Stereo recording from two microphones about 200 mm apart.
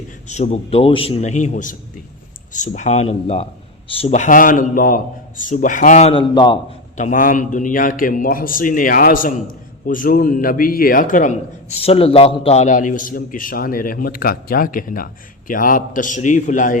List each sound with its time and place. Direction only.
0.3 s a man's voice: 35° left (ahead or behind)
6.1 s a man's voice: 25° left (ahead or behind)
6.9 s a man's voice: 40° left (ahead or behind)
11.8 s a man's voice: 30° left (ahead or behind)